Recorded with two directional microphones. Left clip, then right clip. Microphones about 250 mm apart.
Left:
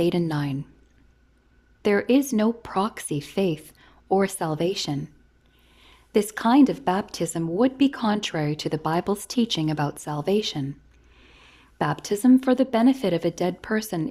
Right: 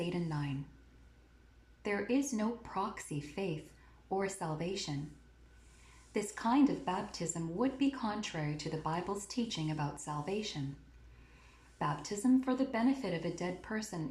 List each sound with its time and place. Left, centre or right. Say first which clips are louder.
0.0 s speech: left 15 dB; left
1.8 s speech: left 14 dB; left
6.1 s speech: left 13 dB; left
11.8 s speech: left 12 dB; left